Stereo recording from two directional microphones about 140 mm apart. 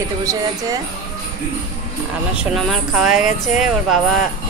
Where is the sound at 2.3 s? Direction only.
Centre (ahead or behind).